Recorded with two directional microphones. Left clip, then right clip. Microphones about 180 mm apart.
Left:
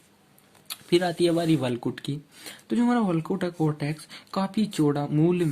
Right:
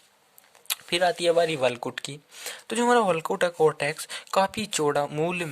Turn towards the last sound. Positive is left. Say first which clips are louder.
# left 2 dB
turn(degrees=-35)  # may be behind; listen again after turning